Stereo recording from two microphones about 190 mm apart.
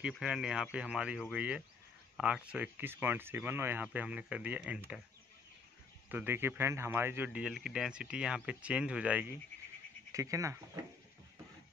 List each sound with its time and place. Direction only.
0.0 s speech: 5° right (ahead or behind)
6.0 s speech: 10° right (ahead or behind)